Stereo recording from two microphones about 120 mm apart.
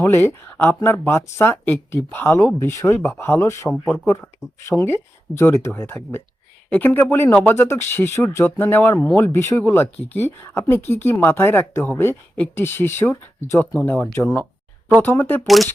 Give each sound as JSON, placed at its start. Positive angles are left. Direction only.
{"t": 0.0, "sound": "speech", "side_deg": 20}
{"t": 3.7, "sound": "speech", "side_deg": 5}
{"t": 4.6, "sound": "speech", "side_deg": 20}